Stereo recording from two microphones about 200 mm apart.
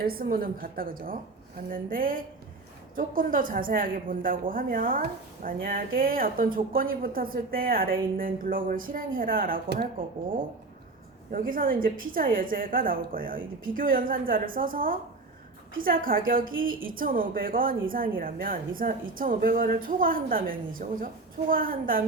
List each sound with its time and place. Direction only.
0.0 s a woman's voice: 45° right (ahead or behind)
11.3 s a woman's voice: 45° right (ahead or behind)